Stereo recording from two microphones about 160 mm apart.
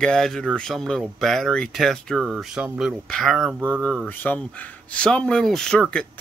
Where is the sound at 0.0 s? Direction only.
5° left (ahead or behind).